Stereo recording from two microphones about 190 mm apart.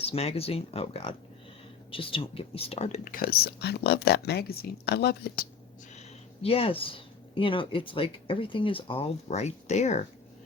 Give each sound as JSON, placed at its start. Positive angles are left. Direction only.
{"t": 0.0, "sound": "speech", "side_deg": 30}
{"t": 5.9, "sound": "speech", "side_deg": 35}